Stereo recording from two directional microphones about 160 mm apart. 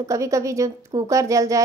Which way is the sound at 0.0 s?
20° right (ahead or behind).